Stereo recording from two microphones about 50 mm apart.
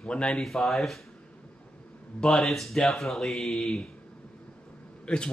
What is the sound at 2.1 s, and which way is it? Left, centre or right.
Speech, centre.